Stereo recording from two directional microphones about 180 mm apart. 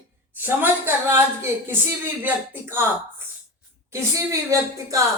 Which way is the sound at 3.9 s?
15° right (ahead or behind).